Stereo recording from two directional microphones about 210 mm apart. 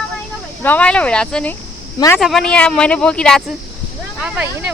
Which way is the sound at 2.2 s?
Centre (ahead or behind).